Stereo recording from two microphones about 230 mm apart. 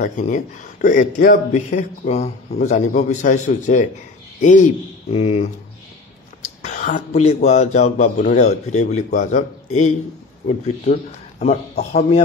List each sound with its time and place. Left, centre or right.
0.0 s speech: left
5.1 s a man's voice: left